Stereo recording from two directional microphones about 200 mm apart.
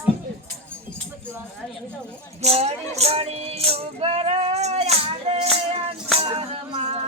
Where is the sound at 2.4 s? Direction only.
30° right (ahead or behind).